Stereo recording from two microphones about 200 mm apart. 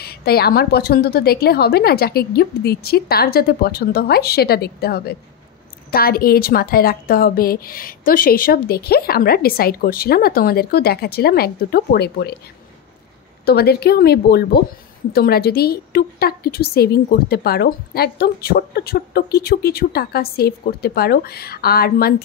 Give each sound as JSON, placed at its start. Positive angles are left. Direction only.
{"t": 0.0, "sound": "a woman's voice", "side_deg": 50}
{"t": 13.5, "sound": "a woman's voice", "side_deg": 50}